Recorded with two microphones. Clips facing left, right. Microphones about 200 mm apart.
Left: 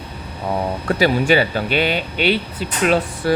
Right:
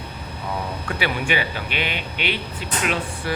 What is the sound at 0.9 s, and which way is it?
Speech, 40° left (ahead or behind).